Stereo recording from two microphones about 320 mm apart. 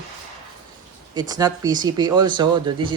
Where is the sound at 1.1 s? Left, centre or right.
Centre.